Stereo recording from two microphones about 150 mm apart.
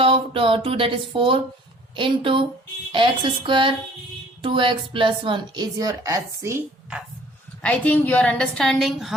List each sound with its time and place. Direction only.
0.0 s a woman's voice: 35° right (ahead or behind); by 6.6 s 20° right (ahead or behind)
7.6 s a woman's voice: 10° left (ahead or behind)